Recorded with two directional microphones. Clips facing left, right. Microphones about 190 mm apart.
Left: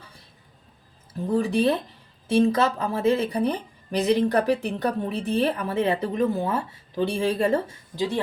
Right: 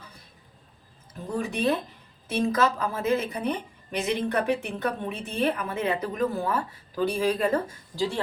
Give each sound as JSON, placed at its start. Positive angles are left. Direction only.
{"t": 1.3, "sound": "a woman's voice", "side_deg": 35}